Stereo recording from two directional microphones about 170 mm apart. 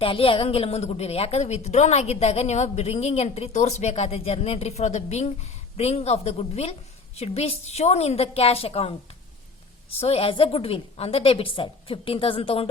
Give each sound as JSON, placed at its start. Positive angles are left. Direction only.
{"t": 0.0, "sound": "a woman's voice", "side_deg": 30}